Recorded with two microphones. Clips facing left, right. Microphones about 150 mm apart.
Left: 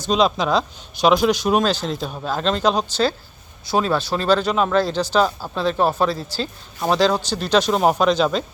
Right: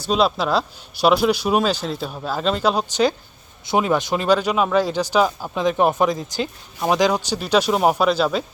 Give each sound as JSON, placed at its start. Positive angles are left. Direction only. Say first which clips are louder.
{"t": 0.0, "sound": "speech", "louder": "left 1 dB", "side_deg": -5}